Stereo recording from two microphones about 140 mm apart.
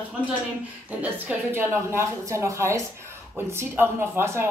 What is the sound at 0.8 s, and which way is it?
A woman's voice, 10° right (ahead or behind).